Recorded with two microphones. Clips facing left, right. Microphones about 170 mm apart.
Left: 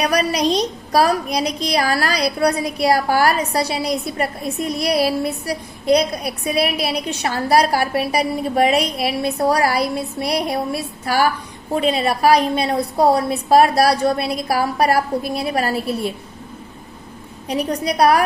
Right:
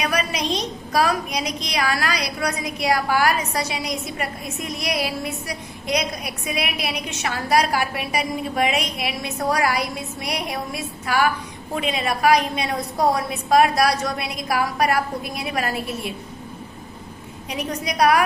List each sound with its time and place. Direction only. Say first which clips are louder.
0.0 s a woman's voice: left 6 dB; 35° left (ahead or behind)
17.5 s a woman's voice: left 6 dB; 35° left (ahead or behind)